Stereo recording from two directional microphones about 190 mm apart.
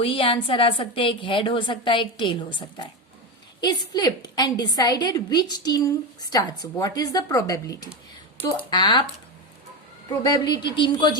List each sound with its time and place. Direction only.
0.0 s a woman's voice: 30° left (ahead or behind); by 8.6 s 10° left (ahead or behind)
8.7 s a woman's voice: 25° left (ahead or behind)
10.1 s a woman's voice: 20° left (ahead or behind)